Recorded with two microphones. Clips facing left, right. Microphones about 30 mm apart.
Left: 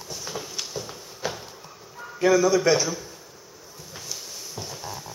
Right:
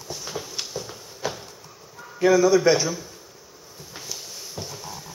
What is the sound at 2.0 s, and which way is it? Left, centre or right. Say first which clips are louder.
Speech: right 2 dB; centre.